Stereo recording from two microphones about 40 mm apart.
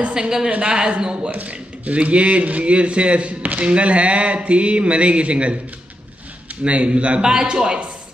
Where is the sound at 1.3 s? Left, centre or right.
Right.